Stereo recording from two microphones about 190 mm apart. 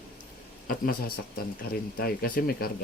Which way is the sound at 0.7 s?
50° left (ahead or behind).